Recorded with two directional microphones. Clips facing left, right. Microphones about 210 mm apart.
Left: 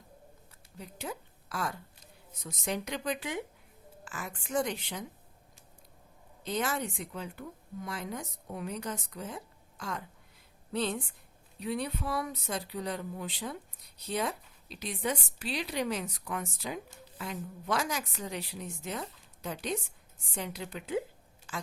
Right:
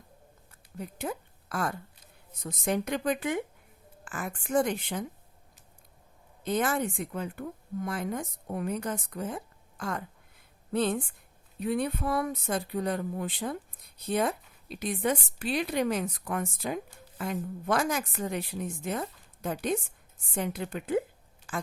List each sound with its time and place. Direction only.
0.8 s a woman's voice: 50° right (ahead or behind)
6.4 s a woman's voice: 50° right (ahead or behind)
21.5 s a sound: 50° right (ahead or behind)